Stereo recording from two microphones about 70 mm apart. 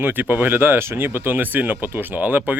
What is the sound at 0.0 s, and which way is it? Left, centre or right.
Speech, right.